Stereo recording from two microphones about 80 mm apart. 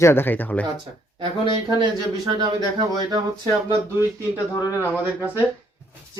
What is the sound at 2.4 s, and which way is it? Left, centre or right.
Speech, right.